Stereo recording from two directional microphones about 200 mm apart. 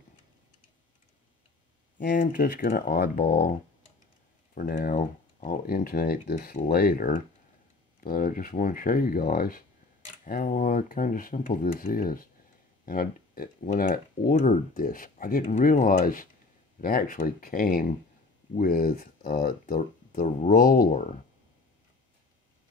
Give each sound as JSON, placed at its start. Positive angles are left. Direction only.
{"t": 2.0, "sound": "speech", "side_deg": 45}
{"t": 4.6, "sound": "speech", "side_deg": 45}